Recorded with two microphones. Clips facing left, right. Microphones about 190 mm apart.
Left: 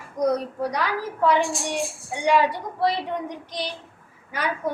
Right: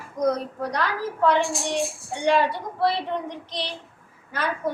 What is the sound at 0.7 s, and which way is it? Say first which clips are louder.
A woman's voice: even; 10° left (ahead or behind).